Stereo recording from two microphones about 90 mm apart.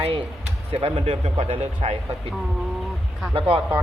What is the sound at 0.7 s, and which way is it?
Speech, 90° right.